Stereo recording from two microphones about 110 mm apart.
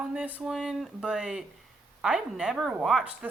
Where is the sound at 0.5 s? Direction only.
Centre (ahead or behind).